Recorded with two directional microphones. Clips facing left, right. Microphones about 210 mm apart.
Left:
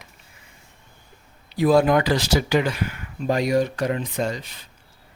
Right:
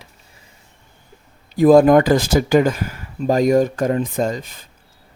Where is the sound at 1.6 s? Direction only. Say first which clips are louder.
Right 7 dB; 45° right (ahead or behind).